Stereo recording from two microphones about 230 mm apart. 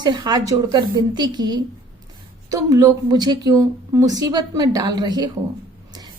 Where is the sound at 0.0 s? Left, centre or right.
Centre.